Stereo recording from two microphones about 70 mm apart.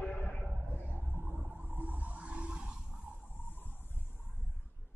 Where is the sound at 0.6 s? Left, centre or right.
Right; by 3.1 s centre.